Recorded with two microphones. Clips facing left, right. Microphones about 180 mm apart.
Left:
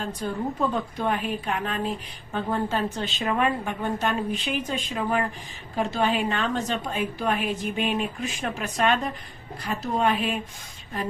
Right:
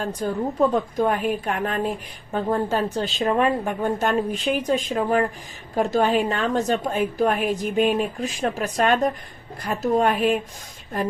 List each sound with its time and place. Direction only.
0.2 s a woman's voice: 45° right (ahead or behind)